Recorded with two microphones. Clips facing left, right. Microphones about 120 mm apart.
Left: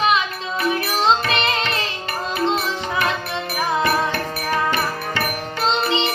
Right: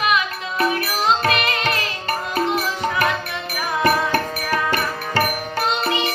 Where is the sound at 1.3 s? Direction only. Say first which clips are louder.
Right 1 dB; 25° left (ahead or behind).